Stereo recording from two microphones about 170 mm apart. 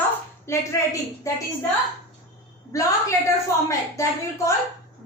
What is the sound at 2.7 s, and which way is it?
A woman's voice, 20° left (ahead or behind).